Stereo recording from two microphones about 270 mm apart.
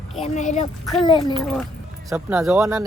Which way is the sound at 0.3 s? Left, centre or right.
Left.